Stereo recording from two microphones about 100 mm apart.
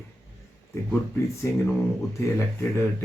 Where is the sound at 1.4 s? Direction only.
25° left (ahead or behind).